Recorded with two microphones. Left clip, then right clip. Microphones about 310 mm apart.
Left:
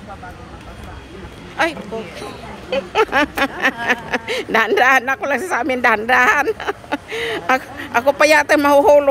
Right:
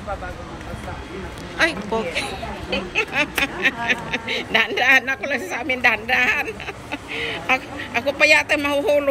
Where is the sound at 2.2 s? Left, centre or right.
Centre.